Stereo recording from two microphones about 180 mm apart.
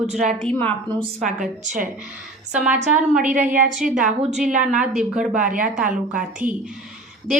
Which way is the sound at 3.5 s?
50° right (ahead or behind).